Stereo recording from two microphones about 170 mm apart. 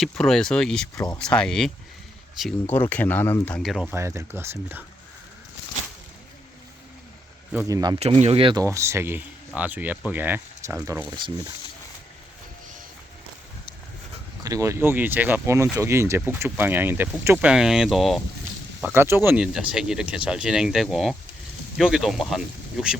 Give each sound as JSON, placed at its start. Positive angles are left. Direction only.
{"t": 0.0, "sound": "speech", "side_deg": 0}
{"t": 0.9, "sound": "speech", "side_deg": 20}
{"t": 1.2, "sound": "speech", "side_deg": 5}
{"t": 3.9, "sound": "speech", "side_deg": -15}
{"t": 7.5, "sound": "speech", "side_deg": -15}
{"t": 7.9, "sound": "speech", "side_deg": -40}
{"t": 8.6, "sound": "speech", "side_deg": -15}
{"t": 14.4, "sound": "speech", "side_deg": -20}
{"t": 18.8, "sound": "speech", "side_deg": -10}